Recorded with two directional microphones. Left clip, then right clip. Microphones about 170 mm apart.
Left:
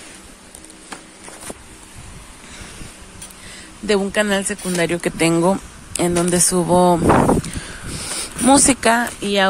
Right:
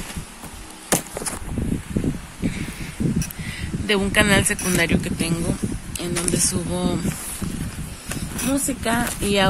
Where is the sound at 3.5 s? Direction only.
20° left (ahead or behind).